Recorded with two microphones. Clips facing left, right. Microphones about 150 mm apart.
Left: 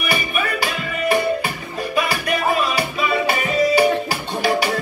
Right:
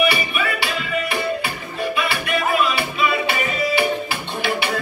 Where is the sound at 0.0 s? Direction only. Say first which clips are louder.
Right 2 dB; 45° left (ahead or behind).